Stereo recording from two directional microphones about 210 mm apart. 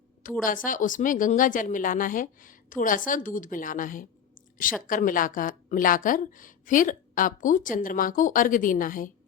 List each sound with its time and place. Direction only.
0.2 s a woman's voice: 40° left (ahead or behind)